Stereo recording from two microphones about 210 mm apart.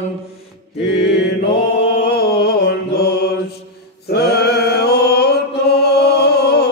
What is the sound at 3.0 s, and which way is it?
Mantra, 50° left (ahead or behind).